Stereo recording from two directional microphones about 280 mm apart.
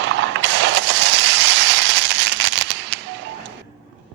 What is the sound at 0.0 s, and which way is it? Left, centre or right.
Mechanisms, right.